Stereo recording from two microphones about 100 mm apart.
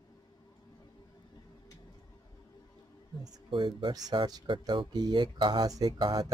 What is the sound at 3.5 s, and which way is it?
Speech, 50° right (ahead or behind).